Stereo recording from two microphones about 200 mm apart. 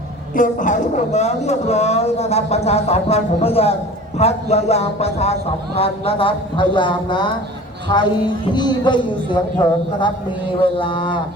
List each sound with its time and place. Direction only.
0.3 s a man's voice: 40° left (ahead or behind); by 11.2 s 25° left (ahead or behind)